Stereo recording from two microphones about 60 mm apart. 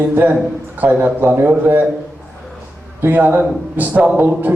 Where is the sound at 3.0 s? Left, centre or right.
Right.